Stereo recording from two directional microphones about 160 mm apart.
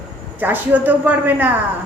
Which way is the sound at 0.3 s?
10° right (ahead or behind).